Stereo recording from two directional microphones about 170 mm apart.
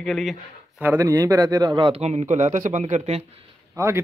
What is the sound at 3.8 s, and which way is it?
Speech, 15° right (ahead or behind).